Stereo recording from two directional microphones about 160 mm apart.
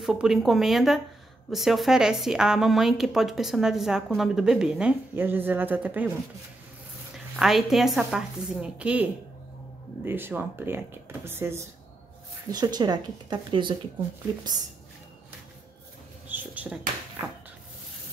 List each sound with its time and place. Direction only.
0.0 s a woman's voice: 5° right (ahead or behind)
7.3 s a woman's voice: centre (ahead or behind)
12.4 s speech: 25° right (ahead or behind)
16.3 s a sound: 10° right (ahead or behind)